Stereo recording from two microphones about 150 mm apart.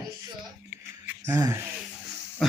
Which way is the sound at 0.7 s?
15° right (ahead or behind).